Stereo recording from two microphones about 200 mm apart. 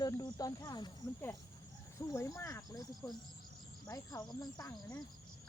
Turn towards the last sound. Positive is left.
turn(degrees=20)  # may be behind; listen again after turning